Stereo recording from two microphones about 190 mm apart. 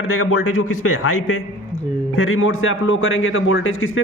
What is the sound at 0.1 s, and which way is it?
A man's voice, 90° left.